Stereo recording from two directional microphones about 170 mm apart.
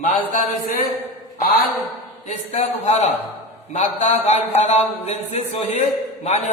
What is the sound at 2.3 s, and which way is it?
A man's voice, 40° left (ahead or behind).